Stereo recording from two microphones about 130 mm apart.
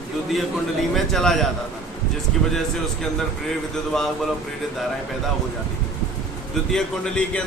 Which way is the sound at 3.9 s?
Centre (ahead or behind).